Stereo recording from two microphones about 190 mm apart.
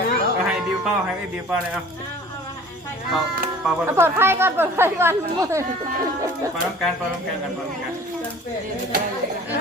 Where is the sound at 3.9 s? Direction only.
10° right (ahead or behind).